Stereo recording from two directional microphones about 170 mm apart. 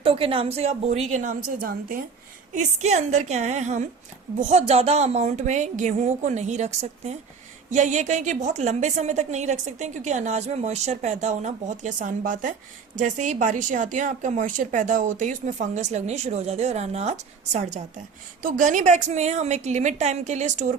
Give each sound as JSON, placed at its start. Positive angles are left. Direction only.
{"t": 0.0, "sound": "a woman's voice", "side_deg": -35}
{"t": 2.6, "sound": "speech", "side_deg": -45}